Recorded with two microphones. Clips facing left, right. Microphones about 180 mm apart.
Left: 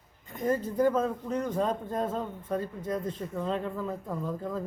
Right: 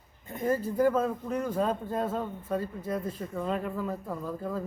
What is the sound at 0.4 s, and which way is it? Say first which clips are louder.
Speech: even; 5° right (ahead or behind).